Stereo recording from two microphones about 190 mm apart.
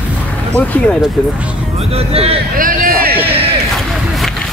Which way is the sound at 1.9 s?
30° right (ahead or behind).